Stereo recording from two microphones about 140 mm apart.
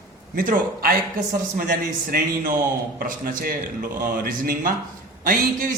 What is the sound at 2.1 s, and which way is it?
A man's voice, 75° right (ahead or behind).